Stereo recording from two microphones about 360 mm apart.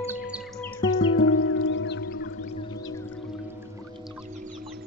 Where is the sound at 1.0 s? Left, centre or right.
Left.